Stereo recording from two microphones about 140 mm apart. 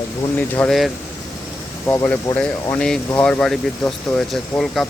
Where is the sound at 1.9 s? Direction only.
15° left (ahead or behind).